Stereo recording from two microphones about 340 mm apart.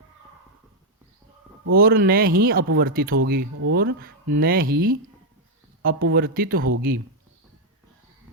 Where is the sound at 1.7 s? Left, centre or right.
Right.